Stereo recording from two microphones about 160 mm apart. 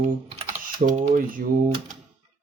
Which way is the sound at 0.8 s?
70° right (ahead or behind).